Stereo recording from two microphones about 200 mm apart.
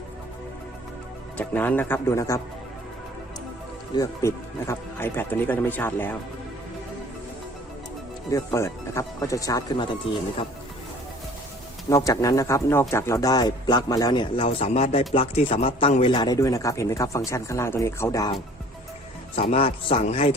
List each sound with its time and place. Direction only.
1.4 s speech: 10° left (ahead or behind)
3.9 s speech: 15° left (ahead or behind)
8.3 s speech: 15° left (ahead or behind)
11.9 s a man's voice: 15° left (ahead or behind)
19.4 s a man's voice: 30° left (ahead or behind)